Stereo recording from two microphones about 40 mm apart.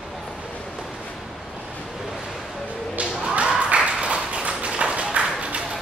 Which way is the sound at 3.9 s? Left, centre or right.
Right.